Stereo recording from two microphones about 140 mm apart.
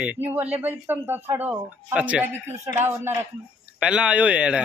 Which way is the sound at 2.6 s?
20° right (ahead or behind).